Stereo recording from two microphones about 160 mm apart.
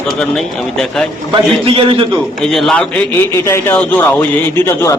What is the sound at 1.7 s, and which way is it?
Speech, 35° right (ahead or behind).